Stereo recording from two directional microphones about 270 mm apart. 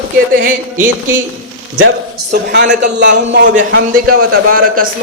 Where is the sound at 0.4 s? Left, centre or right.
Right.